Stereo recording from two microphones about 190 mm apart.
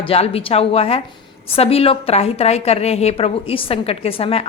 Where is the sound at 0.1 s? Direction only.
30° left (ahead or behind).